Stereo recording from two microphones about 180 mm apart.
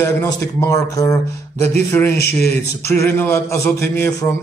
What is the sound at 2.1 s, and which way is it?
Speech, 65° left (ahead or behind).